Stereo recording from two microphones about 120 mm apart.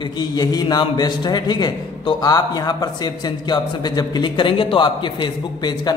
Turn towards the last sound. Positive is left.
turn(degrees=35)  # may be behind; listen again after turning